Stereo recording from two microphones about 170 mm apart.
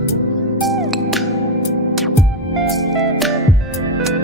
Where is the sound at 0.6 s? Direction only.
Centre (ahead or behind).